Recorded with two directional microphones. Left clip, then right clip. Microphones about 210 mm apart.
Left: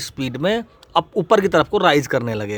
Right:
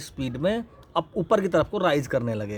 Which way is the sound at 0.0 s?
30° left (ahead or behind).